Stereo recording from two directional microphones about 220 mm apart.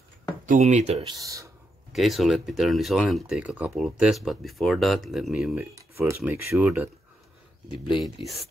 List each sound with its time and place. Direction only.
0.5 s speech: 30° right (ahead or behind)
1.1 s speech: 15° right (ahead or behind)
1.9 s speech: centre (ahead or behind)
8.0 s speech: centre (ahead or behind)